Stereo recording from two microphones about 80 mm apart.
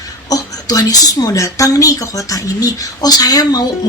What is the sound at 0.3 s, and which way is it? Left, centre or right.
A woman's voice, left.